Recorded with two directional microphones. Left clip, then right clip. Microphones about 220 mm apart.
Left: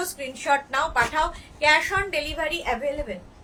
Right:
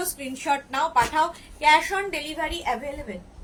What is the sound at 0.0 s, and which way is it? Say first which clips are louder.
A woman's voice: left 1 dB; 15° left (ahead or behind).